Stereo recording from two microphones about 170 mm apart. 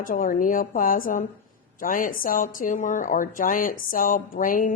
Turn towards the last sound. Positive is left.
turn(degrees=50)  # may be behind; listen again after turning